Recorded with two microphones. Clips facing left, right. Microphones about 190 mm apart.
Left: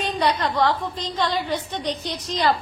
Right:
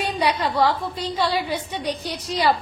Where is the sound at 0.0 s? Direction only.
10° right (ahead or behind).